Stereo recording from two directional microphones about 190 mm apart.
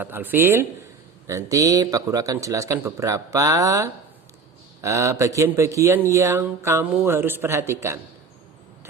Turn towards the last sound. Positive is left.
turn(degrees=-15)  # may be behind; listen again after turning